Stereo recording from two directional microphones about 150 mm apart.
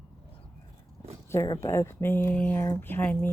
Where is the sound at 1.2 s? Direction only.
15° left (ahead or behind).